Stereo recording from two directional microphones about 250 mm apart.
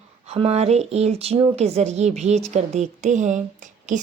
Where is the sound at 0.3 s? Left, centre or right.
Right.